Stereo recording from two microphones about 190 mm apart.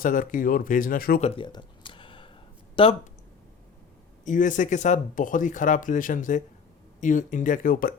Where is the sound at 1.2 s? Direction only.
30° left (ahead or behind).